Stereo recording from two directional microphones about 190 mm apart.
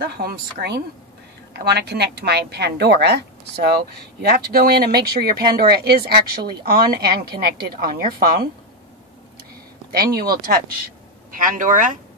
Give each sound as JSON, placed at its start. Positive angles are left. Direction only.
{"t": 0.0, "sound": "a woman's voice", "side_deg": -55}
{"t": 9.9, "sound": "speech", "side_deg": -50}